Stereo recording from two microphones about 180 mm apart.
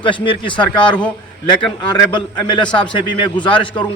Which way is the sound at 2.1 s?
25° left (ahead or behind).